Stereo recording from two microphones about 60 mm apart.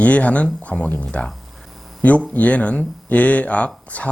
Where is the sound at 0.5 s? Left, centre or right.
Left.